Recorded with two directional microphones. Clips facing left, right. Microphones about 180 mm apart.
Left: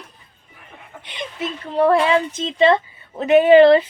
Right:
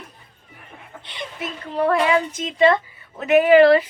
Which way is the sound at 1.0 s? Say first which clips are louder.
Left 4 dB; 20° left (ahead or behind).